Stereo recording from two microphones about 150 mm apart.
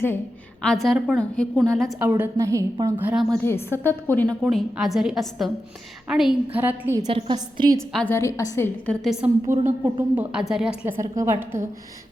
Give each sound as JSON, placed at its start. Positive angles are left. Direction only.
{"t": 0.6, "sound": "a woman's voice", "side_deg": 0}
{"t": 2.0, "sound": "a woman's voice", "side_deg": -10}
{"t": 3.0, "sound": "a woman's voice", "side_deg": -10}
{"t": 3.3, "sound": "a woman's voice", "side_deg": 15}
{"t": 4.4, "sound": "a woman's voice", "side_deg": 0}
{"t": 6.6, "sound": "a woman's voice", "side_deg": -15}
{"t": 7.1, "sound": "a woman's voice", "side_deg": -30}
{"t": 7.8, "sound": "a woman's voice", "side_deg": 5}
{"t": 8.1, "sound": "a woman's voice", "side_deg": 20}
{"t": 9.0, "sound": "a woman's voice", "side_deg": -5}
{"t": 10.8, "sound": "a woman's voice", "side_deg": -20}